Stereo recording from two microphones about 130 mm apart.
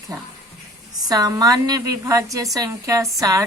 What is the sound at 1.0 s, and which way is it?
Speech, 30° right (ahead or behind).